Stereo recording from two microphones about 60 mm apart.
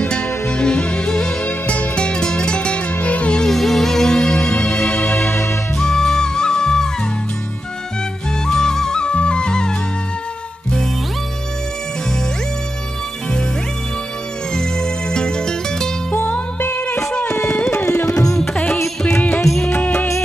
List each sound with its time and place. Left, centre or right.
0.0 s music: centre
3.4 s music: centre; by 5.4 s left
5.8 s music: centre
8.5 s music: centre
14.5 s music: centre
16.2 s music: left
17.7 s music: left
19.7 s music: left